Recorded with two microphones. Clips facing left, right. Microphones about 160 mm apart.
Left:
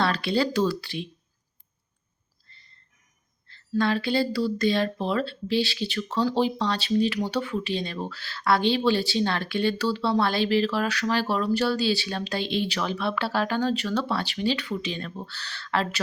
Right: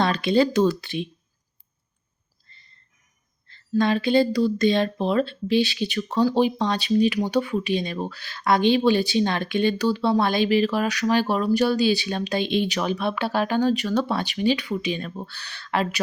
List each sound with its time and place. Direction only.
0.0 s speech: 20° right (ahead or behind)
2.5 s a sound: 15° right (ahead or behind)
3.5 s speech: 15° right (ahead or behind)